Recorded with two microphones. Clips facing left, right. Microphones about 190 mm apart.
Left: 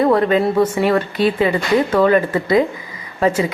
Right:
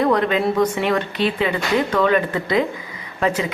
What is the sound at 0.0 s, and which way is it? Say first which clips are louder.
Speech: left 4 dB; 5° left (ahead or behind).